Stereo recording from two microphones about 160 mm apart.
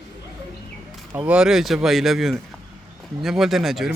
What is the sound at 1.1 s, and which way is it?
Speech, 5° right (ahead or behind).